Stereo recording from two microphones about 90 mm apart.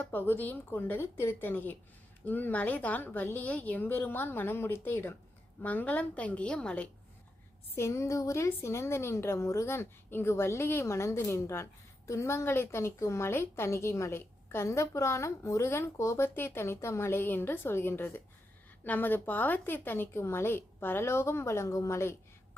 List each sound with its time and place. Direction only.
0.0 s a woman's voice: 20° left (ahead or behind)
7.8 s a woman's voice: 35° left (ahead or behind)